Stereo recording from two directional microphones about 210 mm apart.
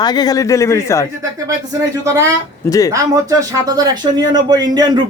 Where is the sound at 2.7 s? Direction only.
15° left (ahead or behind).